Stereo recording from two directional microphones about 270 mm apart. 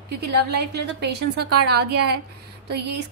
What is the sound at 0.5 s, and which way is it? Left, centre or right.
A woman's voice, right.